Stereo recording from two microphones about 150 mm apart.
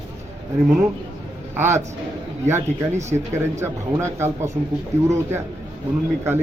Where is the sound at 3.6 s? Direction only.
20° right (ahead or behind).